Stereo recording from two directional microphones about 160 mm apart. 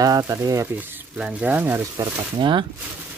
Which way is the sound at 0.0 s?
20° right (ahead or behind).